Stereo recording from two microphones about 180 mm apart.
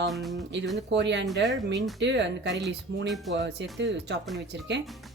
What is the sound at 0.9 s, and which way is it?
Speech, 75° right (ahead or behind).